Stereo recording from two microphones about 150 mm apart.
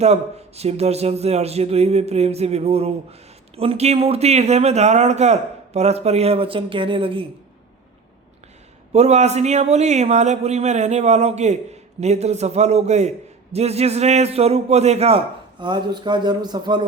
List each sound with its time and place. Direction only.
0.0 s a man's voice: 45° right (ahead or behind)
8.9 s a man's voice: 45° right (ahead or behind)
15.6 s a man's voice: 30° right (ahead or behind)